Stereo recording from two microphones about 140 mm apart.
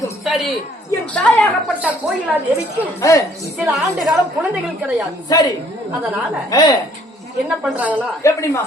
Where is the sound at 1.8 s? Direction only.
10° right (ahead or behind).